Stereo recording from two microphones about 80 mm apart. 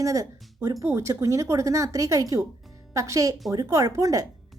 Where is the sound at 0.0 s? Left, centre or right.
Right.